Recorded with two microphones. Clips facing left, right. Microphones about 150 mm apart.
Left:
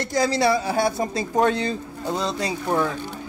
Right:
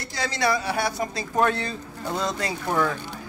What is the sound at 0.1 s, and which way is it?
A woman's voice, 35° left (ahead or behind).